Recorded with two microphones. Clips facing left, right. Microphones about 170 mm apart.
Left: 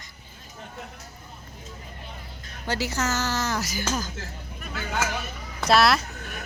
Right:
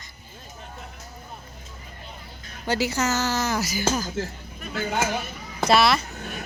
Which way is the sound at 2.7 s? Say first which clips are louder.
Right 3 dB; 10° right (ahead or behind).